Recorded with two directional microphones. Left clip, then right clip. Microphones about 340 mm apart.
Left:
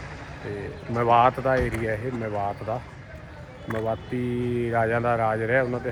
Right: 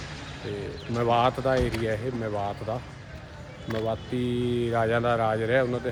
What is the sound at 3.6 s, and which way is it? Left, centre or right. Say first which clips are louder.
Speech: left 1 dB; centre.